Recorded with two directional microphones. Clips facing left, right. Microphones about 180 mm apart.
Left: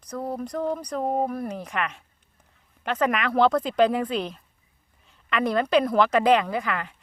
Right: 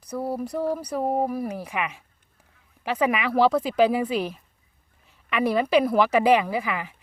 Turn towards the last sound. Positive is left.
turn(degrees=-5)  # may be behind; listen again after turning